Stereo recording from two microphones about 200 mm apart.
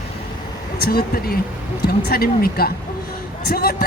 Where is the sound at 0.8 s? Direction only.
50° left (ahead or behind).